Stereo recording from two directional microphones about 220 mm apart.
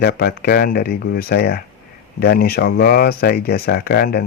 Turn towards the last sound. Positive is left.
turn(degrees=45)  # may be behind; listen again after turning